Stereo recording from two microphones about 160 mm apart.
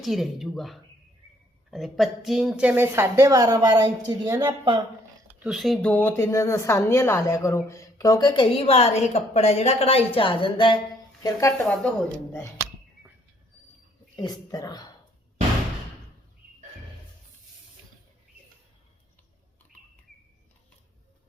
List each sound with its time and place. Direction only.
0.0 s a woman's voice: centre (ahead or behind); by 4.8 s 30° right (ahead or behind)
5.3 s speech: 5° right (ahead or behind); by 10.8 s 30° left (ahead or behind)
11.2 s speech: 20° left (ahead or behind)
11.5 s a woman's voice: 5° left (ahead or behind)
14.2 s speech: 25° left (ahead or behind)